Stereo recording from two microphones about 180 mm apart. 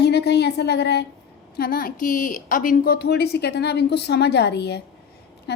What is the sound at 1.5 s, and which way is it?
A woman's voice, 55° left (ahead or behind).